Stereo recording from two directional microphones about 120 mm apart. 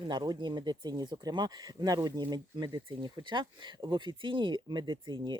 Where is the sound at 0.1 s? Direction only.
35° right (ahead or behind).